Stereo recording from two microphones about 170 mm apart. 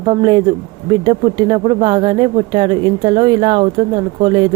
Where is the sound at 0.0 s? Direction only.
25° right (ahead or behind).